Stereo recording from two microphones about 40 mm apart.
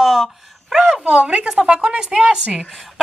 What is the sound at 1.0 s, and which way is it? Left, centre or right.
Speech, right.